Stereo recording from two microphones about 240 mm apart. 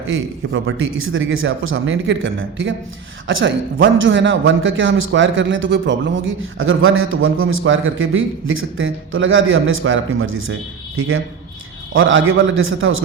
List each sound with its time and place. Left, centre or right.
0.1 s a man's voice: right
3.9 s a man's voice: right
11.9 s a man's voice: right